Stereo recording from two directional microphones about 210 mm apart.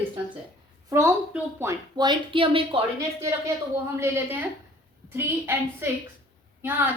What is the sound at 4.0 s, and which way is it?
A woman's voice, 10° right (ahead or behind).